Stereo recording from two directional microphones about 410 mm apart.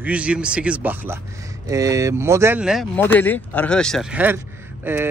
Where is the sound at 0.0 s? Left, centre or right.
Centre.